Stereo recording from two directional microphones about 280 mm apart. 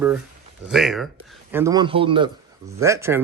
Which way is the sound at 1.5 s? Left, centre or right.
Centre.